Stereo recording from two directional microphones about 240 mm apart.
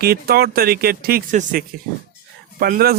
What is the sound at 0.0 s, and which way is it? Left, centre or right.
Speech, right.